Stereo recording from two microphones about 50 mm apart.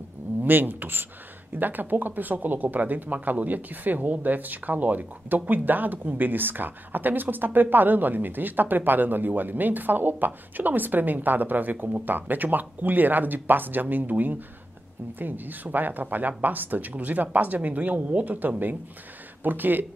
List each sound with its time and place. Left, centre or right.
0.4 s speech: right